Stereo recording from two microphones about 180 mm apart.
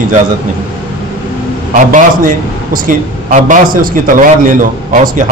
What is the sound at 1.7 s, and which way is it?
A man's voice, 50° right (ahead or behind).